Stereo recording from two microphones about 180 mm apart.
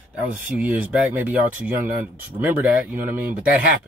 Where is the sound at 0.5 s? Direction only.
10° right (ahead or behind).